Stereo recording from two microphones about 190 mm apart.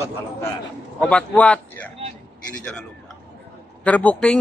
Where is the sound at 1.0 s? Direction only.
5° left (ahead or behind).